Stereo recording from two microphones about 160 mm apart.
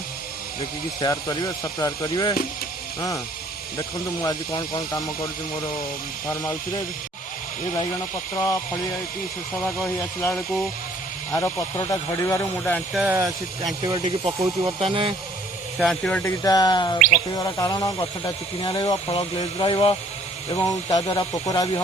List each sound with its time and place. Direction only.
0.6 s speech: 25° left (ahead or behind)
3.8 s speech: 20° left (ahead or behind)
8.4 s speech: 20° left (ahead or behind)
12.9 s speech: centre (ahead or behind)
13.1 s speech: 20° right (ahead or behind)
14.8 s speech: 35° right (ahead or behind)
15.8 s speech: centre (ahead or behind)
16.4 s speech: 25° left (ahead or behind)
20.5 s speech: 20° left (ahead or behind)